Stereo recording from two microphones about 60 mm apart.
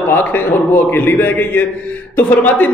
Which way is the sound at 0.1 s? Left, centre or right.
Left.